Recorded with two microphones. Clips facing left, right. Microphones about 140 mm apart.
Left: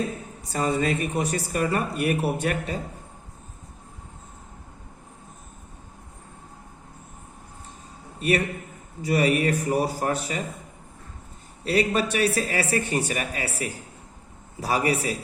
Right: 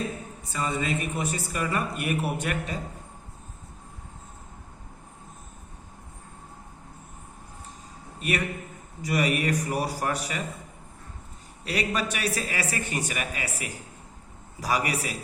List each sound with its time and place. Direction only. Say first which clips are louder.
0.4 s speech: left 5 dB; 40° left (ahead or behind)
9.0 s speech: left 4 dB; 30° left (ahead or behind)
11.6 s speech: left 6 dB; 30° left (ahead or behind)